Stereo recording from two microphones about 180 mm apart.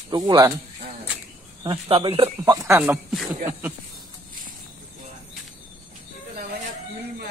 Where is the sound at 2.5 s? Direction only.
15° right (ahead or behind).